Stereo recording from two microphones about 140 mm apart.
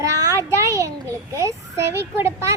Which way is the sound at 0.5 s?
20° right (ahead or behind).